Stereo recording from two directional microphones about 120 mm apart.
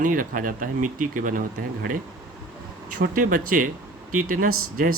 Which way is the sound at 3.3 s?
90° right.